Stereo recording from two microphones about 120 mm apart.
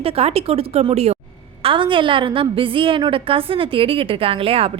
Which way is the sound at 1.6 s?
45° right (ahead or behind).